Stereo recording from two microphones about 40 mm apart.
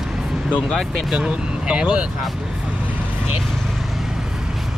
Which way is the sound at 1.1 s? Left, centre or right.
Right.